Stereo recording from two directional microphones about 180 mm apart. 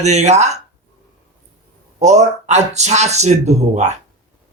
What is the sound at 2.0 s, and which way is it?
Speech, 40° right (ahead or behind).